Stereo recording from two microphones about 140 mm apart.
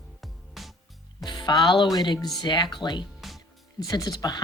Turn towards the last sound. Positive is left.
turn(degrees=25)  # may be behind; listen again after turning